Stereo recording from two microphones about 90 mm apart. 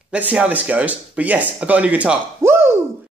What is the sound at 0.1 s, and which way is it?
Speech, 15° right (ahead or behind).